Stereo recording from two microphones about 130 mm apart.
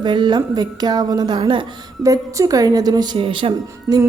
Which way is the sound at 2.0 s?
25° right (ahead or behind).